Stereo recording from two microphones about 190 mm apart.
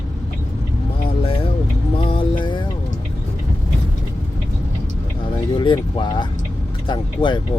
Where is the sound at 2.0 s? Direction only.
25° left (ahead or behind).